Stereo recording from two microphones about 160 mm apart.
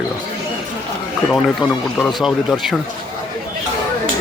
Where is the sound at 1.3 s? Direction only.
Centre (ahead or behind).